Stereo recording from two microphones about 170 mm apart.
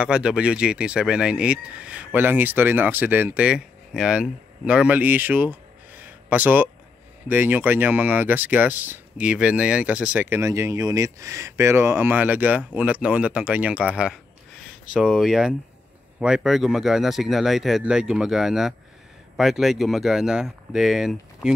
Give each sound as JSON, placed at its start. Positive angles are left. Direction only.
{"t": 0.0, "sound": "speech", "side_deg": -5}